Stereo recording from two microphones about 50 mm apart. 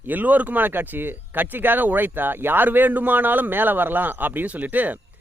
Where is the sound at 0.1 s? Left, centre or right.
Right.